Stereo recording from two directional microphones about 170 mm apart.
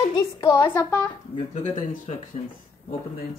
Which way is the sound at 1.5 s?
45° left (ahead or behind).